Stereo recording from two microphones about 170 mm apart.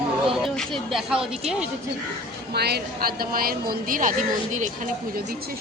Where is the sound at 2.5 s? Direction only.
70° right (ahead or behind); by 5.2 s 50° right (ahead or behind).